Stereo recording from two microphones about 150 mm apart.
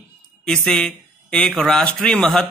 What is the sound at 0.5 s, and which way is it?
Speech, 5° left (ahead or behind).